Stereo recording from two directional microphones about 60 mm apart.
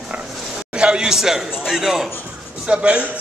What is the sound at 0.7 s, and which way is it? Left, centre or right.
A man's voice, centre.